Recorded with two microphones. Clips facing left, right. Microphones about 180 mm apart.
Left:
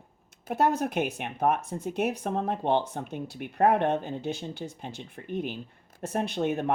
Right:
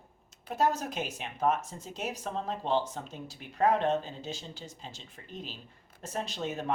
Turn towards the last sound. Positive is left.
turn(degrees=60)  # may be behind; listen again after turning